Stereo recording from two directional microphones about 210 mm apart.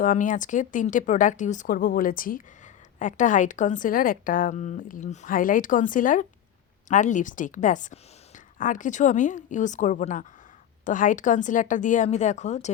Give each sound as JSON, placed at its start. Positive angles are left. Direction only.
{"t": 0.0, "sound": "a woman's voice", "side_deg": 40}